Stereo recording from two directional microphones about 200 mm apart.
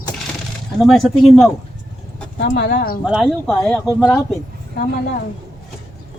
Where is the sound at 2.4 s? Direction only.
60° left (ahead or behind).